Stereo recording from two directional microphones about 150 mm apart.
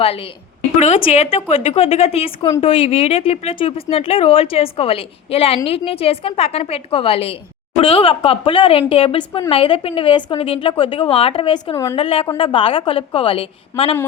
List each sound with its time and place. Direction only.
0.0 s speech: 40° left (ahead or behind)
11.9 s speech: 35° left (ahead or behind)